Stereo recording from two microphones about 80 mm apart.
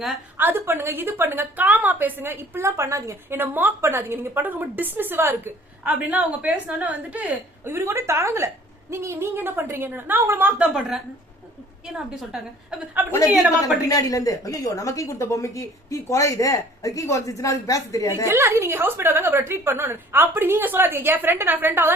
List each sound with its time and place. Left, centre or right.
0.3 s a woman's voice: right
3.3 s a woman's voice: right
10.6 s a woman's voice: centre
12.9 s a woman's voice: right
13.8 s a woman's voice: left
18.3 s a woman's voice: right